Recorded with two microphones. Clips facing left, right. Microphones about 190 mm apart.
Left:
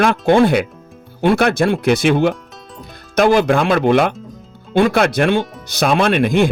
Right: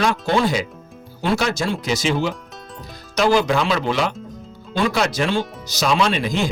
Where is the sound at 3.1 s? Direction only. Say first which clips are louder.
Left 4 dB; 55° left (ahead or behind).